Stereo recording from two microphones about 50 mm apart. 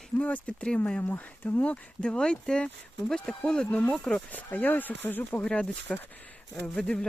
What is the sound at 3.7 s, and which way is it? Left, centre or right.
Speech, left.